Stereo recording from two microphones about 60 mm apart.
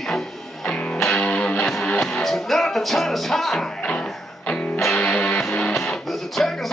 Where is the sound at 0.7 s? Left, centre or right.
Left; by 3.6 s centre.